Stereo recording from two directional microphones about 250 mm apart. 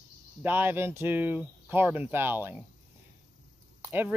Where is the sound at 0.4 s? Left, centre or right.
Centre.